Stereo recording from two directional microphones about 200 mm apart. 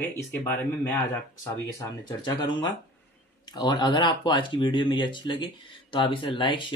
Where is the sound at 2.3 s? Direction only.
20° left (ahead or behind).